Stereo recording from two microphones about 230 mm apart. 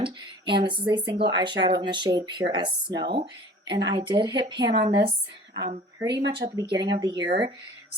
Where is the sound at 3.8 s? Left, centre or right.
Centre.